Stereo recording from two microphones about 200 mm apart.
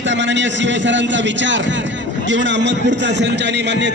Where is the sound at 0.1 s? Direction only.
65° right (ahead or behind).